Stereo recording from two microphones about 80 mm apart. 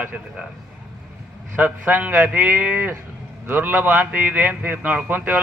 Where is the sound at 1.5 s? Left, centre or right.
Right.